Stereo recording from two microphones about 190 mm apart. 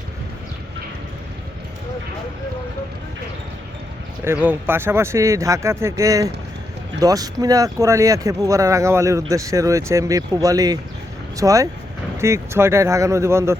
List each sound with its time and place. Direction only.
4.2 s speech: 10° right (ahead or behind)